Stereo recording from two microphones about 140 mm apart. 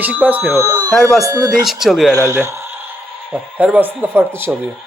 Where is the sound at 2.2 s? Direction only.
25° right (ahead or behind).